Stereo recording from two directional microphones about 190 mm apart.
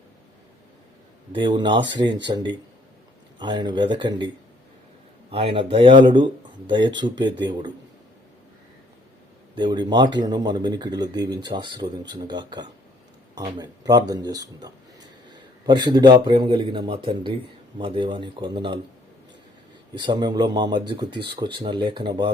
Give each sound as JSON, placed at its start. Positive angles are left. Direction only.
{"t": 1.3, "sound": "speech", "side_deg": -25}
{"t": 5.3, "sound": "speech", "side_deg": -30}
{"t": 9.6, "sound": "speech", "side_deg": -25}
{"t": 19.9, "sound": "speech", "side_deg": -25}